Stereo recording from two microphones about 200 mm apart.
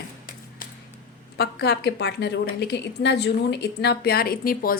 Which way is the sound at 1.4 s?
55° left (ahead or behind).